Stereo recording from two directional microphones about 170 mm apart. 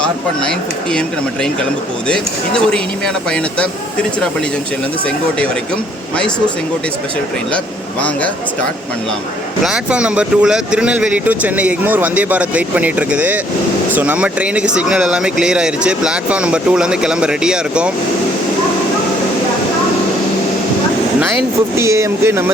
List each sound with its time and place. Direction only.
3.2 s speech: 5° left (ahead or behind)
9.6 s speech: 5° right (ahead or behind)
21.8 s speech: 15° right (ahead or behind)